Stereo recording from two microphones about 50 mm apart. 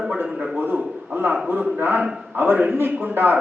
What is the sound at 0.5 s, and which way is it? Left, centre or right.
A man's voice, right.